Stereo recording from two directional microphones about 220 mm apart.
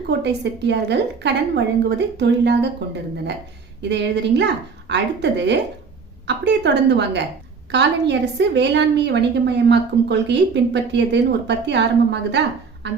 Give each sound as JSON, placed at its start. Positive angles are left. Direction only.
{"t": 0.1, "sound": "a woman's voice", "side_deg": -50}